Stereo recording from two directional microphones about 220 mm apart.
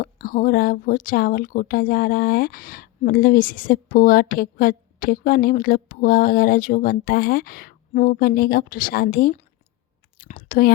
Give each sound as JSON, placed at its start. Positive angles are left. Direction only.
{"t": 0.0, "sound": "speech", "side_deg": 40}